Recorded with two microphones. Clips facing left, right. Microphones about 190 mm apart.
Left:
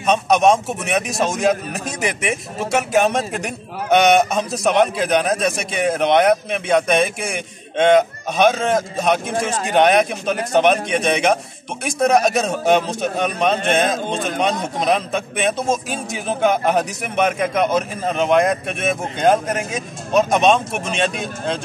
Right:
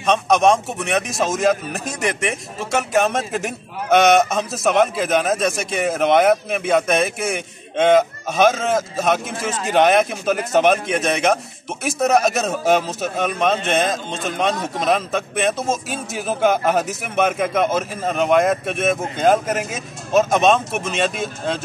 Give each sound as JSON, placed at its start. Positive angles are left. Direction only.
{"t": 0.0, "sound": "a man's voice", "side_deg": 0}